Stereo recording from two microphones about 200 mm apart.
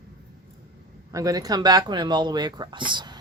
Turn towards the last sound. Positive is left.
turn(degrees=-25)  # may be behind; listen again after turning